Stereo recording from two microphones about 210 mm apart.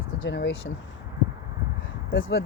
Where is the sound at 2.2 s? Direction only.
65° left (ahead or behind).